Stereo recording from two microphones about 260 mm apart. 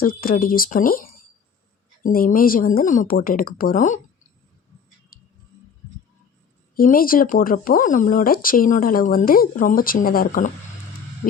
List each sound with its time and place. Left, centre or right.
0.0 s speech: left
5.1 s music: left
6.7 s speech: left